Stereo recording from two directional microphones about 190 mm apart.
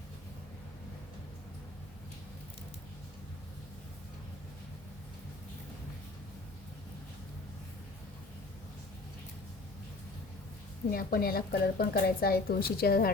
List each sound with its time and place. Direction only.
10.9 s a woman's voice: 50° left (ahead or behind)